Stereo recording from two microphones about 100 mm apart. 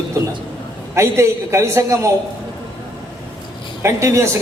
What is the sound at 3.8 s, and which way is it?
Speech, 30° right (ahead or behind).